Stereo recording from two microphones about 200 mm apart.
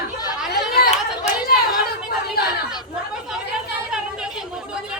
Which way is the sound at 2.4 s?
50° left (ahead or behind).